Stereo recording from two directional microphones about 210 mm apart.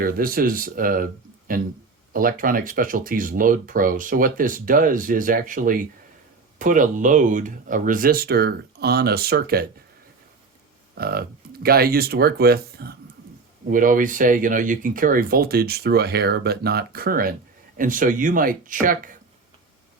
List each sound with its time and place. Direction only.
0.0 s speech: 45° right (ahead or behind)
10.9 s speech: 45° right (ahead or behind)